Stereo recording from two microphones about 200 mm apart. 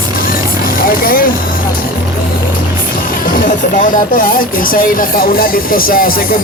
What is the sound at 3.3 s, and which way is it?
Speech, 40° left (ahead or behind).